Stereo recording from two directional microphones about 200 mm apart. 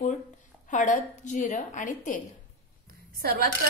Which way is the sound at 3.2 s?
50° right (ahead or behind).